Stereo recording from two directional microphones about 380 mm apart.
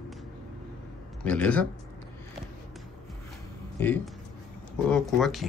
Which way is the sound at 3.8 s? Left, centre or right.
Centre.